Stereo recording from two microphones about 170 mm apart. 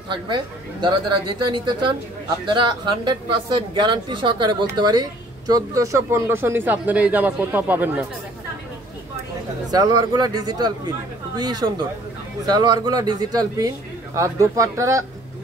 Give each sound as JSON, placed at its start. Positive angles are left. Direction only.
{"t": 0.1, "sound": "speech", "side_deg": -25}
{"t": 9.7, "sound": "speech", "side_deg": -20}